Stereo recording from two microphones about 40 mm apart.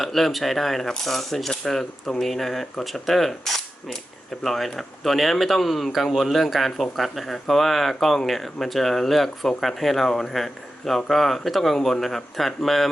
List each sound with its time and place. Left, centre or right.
0.0 s a man's voice: centre